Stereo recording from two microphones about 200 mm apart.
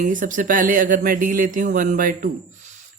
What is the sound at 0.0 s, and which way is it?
Speech, 40° right (ahead or behind).